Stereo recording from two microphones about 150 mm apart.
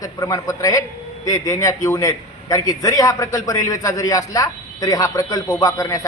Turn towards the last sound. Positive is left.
turn(degrees=20)  # may be behind; listen again after turning